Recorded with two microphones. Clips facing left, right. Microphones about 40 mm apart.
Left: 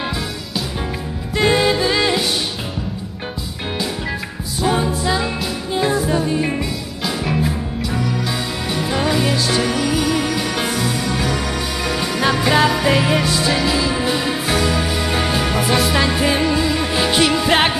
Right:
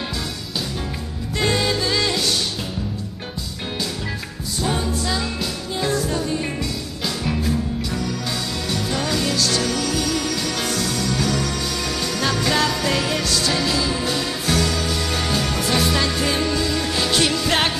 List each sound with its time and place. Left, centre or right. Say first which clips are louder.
1.3 s music: left 5 dB; centre
4.7 s music: left 5 dB; centre